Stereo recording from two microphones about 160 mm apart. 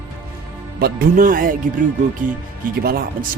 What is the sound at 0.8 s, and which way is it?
Speech, 70° right (ahead or behind).